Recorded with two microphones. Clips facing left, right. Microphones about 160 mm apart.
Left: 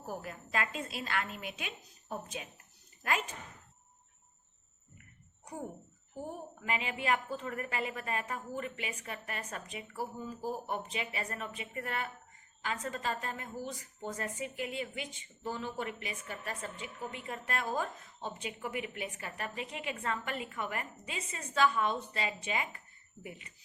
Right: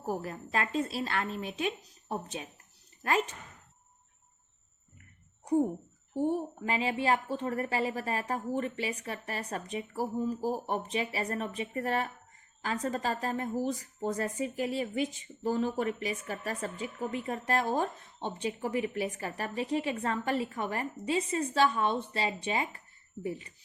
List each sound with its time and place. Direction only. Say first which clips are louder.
0.2 s a woman's voice: right 3 dB; 35° right (ahead or behind)
6.1 s a woman's voice: right 12 dB; 30° right (ahead or behind)